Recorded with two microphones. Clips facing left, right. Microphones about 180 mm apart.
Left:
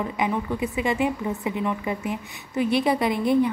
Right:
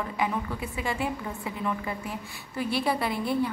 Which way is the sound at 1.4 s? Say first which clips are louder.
Left 4 dB; 15° left (ahead or behind).